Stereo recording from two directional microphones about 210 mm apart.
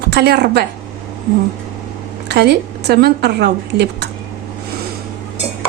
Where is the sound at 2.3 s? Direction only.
50° right (ahead or behind).